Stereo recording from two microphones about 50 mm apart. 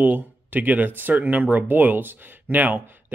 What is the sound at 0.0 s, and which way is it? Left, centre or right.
Speech, right.